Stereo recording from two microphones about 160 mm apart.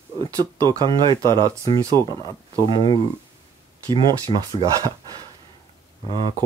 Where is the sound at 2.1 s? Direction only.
20° left (ahead or behind).